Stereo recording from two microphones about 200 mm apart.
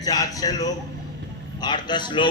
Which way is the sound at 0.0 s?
20° left (ahead or behind).